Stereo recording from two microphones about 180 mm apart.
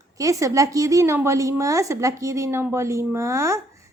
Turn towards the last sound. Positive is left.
turn(degrees=-15)  # may be behind; listen again after turning